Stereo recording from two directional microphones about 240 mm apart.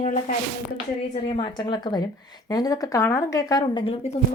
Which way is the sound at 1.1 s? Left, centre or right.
Centre.